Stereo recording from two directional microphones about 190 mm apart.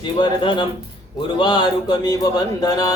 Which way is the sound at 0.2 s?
25° left (ahead or behind).